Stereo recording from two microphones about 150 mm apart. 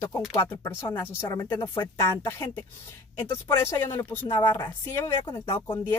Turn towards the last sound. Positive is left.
turn(degrees=35)  # may be behind; listen again after turning